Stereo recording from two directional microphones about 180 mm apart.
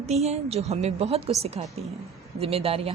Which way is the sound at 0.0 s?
35° right (ahead or behind).